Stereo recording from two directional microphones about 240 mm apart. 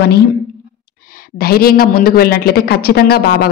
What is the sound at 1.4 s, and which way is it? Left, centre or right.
Speech, left.